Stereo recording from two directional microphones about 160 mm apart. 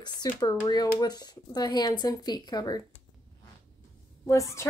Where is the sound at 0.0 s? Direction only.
25° left (ahead or behind).